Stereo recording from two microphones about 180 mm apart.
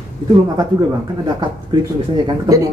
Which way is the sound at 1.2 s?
25° right (ahead or behind).